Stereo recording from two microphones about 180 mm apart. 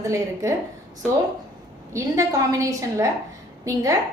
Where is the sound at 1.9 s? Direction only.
20° right (ahead or behind).